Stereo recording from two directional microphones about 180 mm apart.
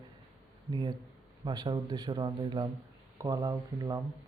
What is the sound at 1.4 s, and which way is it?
Speech, 25° right (ahead or behind).